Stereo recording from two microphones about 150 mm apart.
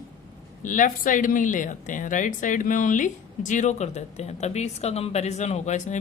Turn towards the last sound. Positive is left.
turn(degrees=50)  # may be behind; listen again after turning